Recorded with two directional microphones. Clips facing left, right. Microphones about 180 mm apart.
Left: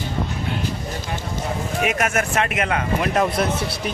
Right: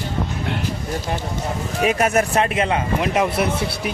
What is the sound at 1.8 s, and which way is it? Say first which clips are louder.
Speech: right 5 dB; 30° right (ahead or behind).